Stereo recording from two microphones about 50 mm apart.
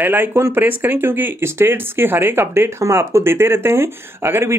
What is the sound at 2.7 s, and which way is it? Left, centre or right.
Speech, right.